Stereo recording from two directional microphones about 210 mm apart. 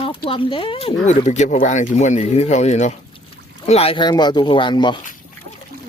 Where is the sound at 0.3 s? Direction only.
25° left (ahead or behind).